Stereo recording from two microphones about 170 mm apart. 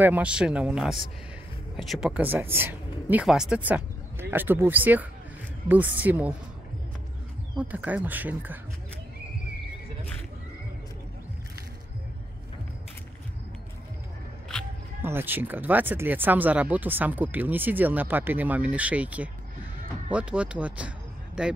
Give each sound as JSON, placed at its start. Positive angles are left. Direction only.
{"t": 0.0, "sound": "speech", "side_deg": -10}
{"t": 7.5, "sound": "speech", "side_deg": -10}
{"t": 15.0, "sound": "speech", "side_deg": -10}